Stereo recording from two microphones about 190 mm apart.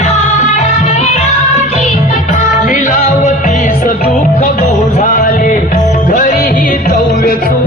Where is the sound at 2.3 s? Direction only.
40° left (ahead or behind).